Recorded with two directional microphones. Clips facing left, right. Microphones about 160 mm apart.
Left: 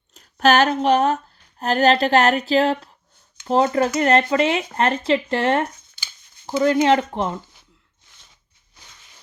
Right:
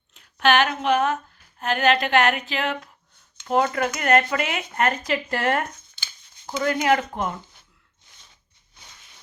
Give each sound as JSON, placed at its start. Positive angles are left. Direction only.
{"t": 0.1, "sound": "speech", "side_deg": 40}
{"t": 6.0, "sound": "a sound", "side_deg": 10}
{"t": 6.8, "sound": "speech", "side_deg": 25}